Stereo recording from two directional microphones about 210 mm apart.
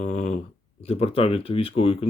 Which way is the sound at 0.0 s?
35° left (ahead or behind).